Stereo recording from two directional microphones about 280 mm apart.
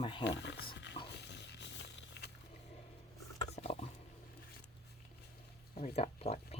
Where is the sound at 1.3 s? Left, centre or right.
Left.